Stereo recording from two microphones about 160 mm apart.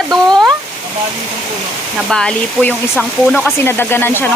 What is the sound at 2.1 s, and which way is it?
Speech, 5° left (ahead or behind).